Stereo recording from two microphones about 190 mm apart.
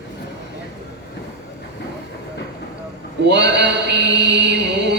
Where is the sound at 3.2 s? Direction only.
65° right (ahead or behind).